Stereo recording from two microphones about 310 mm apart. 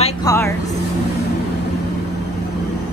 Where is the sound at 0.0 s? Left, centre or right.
Centre.